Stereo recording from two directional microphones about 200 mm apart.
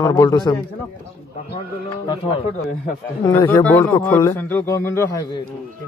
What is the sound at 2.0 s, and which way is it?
Speech, 25° left (ahead or behind).